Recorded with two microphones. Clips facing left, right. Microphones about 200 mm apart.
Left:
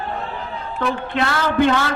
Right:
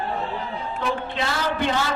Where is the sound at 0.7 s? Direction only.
60° left (ahead or behind).